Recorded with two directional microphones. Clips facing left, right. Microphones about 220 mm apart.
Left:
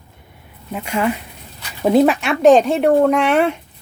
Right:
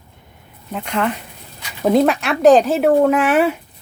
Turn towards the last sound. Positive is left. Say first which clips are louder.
# even
turn(degrees=-5)  # may be behind; listen again after turning